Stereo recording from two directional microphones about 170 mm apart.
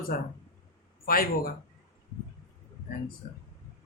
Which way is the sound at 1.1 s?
60° left (ahead or behind).